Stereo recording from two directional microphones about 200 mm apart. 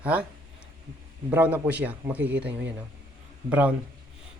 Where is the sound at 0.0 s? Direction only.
5° right (ahead or behind).